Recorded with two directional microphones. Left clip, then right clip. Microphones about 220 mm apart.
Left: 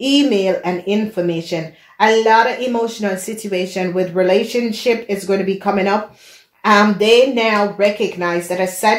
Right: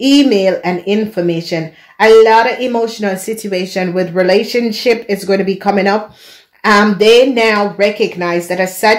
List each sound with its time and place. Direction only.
0.0 s speech: 40° right (ahead or behind)